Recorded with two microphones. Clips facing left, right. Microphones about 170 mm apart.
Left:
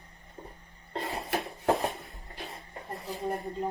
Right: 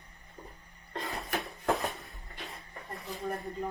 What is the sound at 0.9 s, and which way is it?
Cough, 30° left (ahead or behind).